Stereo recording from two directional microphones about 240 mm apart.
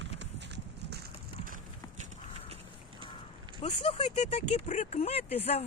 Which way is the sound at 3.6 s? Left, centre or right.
Left.